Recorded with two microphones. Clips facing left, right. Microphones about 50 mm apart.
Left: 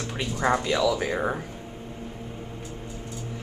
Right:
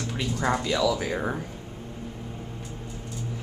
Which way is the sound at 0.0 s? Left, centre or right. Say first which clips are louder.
Left 1 dB; centre.